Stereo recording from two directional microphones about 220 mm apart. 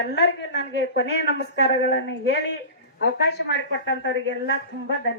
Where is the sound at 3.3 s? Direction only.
50° left (ahead or behind).